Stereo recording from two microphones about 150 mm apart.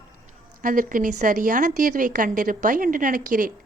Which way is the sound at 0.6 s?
65° right (ahead or behind).